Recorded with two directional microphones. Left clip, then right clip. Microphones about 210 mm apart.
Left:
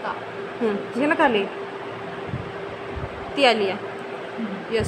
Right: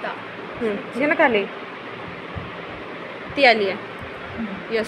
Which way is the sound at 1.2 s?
20° left (ahead or behind).